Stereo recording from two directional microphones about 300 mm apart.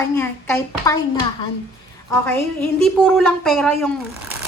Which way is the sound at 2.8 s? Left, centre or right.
Centre.